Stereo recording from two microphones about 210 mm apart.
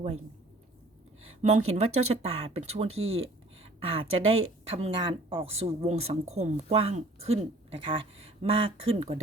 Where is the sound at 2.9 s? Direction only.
70° right (ahead or behind).